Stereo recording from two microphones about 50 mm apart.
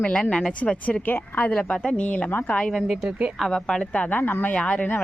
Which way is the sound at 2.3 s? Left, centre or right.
Left.